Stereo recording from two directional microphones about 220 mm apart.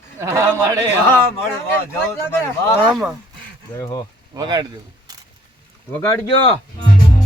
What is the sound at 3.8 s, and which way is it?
Speech, 15° left (ahead or behind).